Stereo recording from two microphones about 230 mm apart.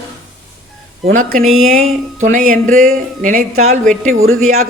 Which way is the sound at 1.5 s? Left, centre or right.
Right.